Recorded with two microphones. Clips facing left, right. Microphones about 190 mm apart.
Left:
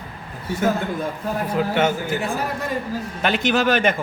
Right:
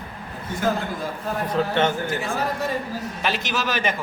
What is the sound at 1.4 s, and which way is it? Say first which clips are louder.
Speech: left 1 dB; 10° left (ahead or behind).